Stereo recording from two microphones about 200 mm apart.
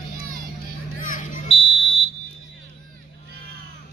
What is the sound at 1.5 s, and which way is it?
Smoke detector, 25° left (ahead or behind).